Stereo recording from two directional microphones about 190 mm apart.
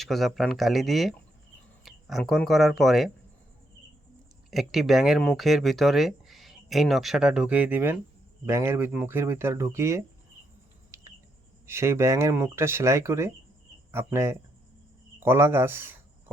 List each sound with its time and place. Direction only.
0.0 s speech: centre (ahead or behind)
4.5 s speech: centre (ahead or behind)
10.9 s cricket: 15° right (ahead or behind)
11.6 s speech: 15° right (ahead or behind)